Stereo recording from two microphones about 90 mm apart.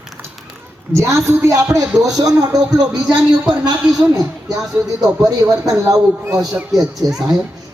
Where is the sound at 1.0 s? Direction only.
35° right (ahead or behind).